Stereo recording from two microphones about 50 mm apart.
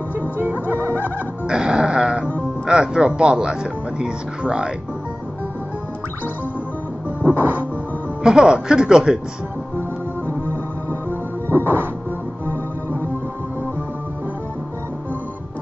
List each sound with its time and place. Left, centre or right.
0.4 s music: right
1.5 s music: centre
2.6 s speech: centre
7.2 s music: right
8.2 s speech: centre
11.4 s music: right